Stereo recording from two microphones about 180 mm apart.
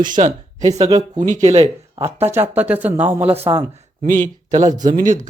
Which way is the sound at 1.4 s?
35° right (ahead or behind).